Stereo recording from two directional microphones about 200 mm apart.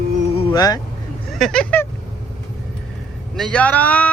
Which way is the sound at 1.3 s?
Centre (ahead or behind).